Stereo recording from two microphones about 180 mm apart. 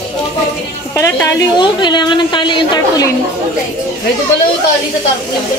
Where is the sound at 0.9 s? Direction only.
15° left (ahead or behind).